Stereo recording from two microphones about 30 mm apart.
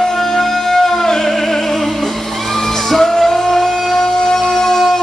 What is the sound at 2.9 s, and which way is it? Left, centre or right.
Music, centre.